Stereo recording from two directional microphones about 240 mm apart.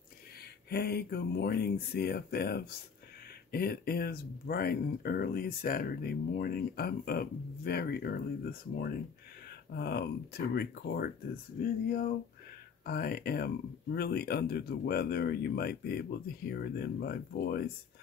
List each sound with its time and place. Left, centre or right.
0.7 s speech: left
12.8 s speech: left